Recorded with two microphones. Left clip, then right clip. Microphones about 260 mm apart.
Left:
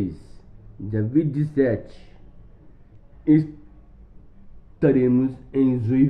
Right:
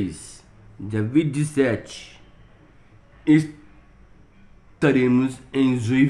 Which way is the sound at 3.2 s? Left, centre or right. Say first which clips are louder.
Right 1 dB; right.